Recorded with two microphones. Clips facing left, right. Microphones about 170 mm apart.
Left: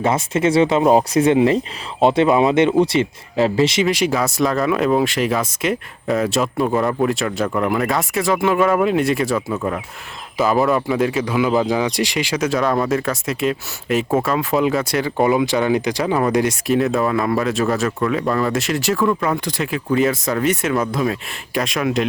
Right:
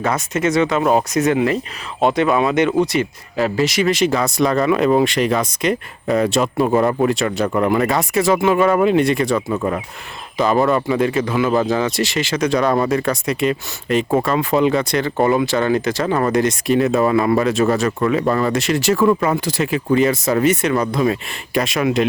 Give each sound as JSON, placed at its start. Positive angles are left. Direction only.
{"t": 0.0, "sound": "speech", "side_deg": 25}
{"t": 3.8, "sound": "speech", "side_deg": 10}
{"t": 15.4, "sound": "speech", "side_deg": 15}